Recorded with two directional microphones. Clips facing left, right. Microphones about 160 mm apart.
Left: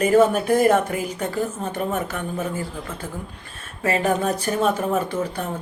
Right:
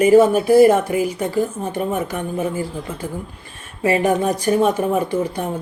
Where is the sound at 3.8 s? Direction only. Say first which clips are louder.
Right 4 dB; 10° right (ahead or behind).